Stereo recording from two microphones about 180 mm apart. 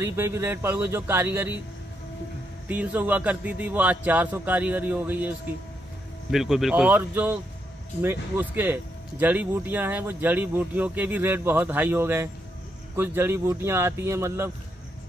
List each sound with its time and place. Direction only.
0.0 s speech: 15° right (ahead or behind)
2.7 s speech: 10° right (ahead or behind)
6.3 s speech: centre (ahead or behind)